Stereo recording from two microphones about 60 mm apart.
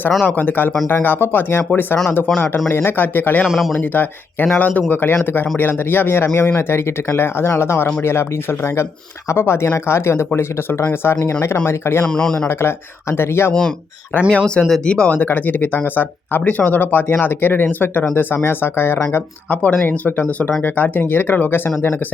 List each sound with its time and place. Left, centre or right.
0.3 s speech: left
3.4 s speech: centre
3.8 s speech: left
12.0 s speech: centre
12.5 s speech: left
13.5 s speech: centre
15.2 s speech: left